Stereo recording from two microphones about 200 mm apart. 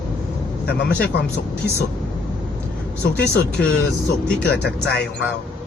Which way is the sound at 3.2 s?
55° left (ahead or behind).